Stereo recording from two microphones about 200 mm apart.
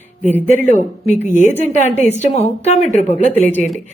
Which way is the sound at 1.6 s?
35° left (ahead or behind).